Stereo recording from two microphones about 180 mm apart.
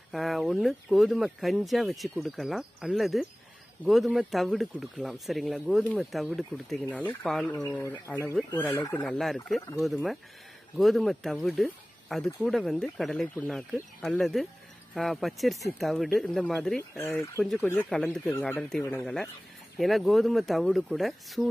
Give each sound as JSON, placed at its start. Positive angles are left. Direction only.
{"t": 0.1, "sound": "speech", "side_deg": 0}
{"t": 16.9, "sound": "speech", "side_deg": 15}
{"t": 17.4, "sound": "speech", "side_deg": 0}